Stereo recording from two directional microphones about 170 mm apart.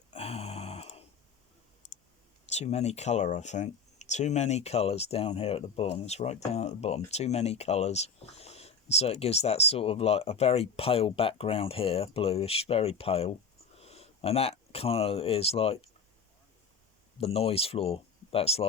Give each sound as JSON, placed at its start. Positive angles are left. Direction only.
{"t": 0.1, "sound": "a sound", "side_deg": 35}
{"t": 2.5, "sound": "speech", "side_deg": 40}
{"t": 17.2, "sound": "speech", "side_deg": 35}